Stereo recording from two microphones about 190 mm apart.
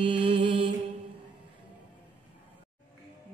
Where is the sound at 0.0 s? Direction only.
30° right (ahead or behind).